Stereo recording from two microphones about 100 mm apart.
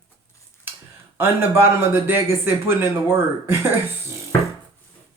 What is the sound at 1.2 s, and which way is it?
Speech, 20° right (ahead or behind).